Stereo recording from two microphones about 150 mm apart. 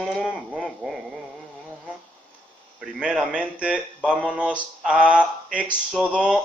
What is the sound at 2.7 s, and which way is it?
Speech, 5° right (ahead or behind).